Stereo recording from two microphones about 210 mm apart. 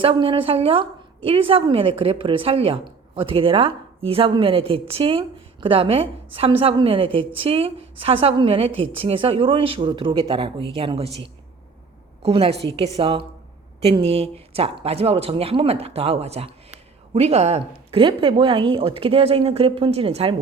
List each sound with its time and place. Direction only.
0.0 s a woman's voice: 25° right (ahead or behind)